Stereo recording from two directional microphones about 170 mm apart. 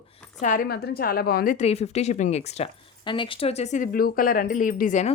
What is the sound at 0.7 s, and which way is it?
Speech, 70° left (ahead or behind).